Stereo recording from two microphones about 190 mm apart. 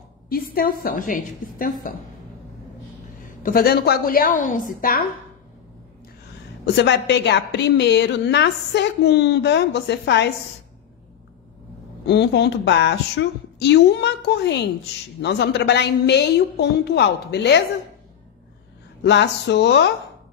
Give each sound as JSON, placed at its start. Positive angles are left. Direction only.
{"t": 0.3, "sound": "a woman's voice", "side_deg": 50}
{"t": 3.4, "sound": "a woman's voice", "side_deg": 50}
{"t": 6.6, "sound": "a woman's voice", "side_deg": 65}
{"t": 12.1, "sound": "a woman's voice", "side_deg": 60}
{"t": 19.0, "sound": "speech", "side_deg": 65}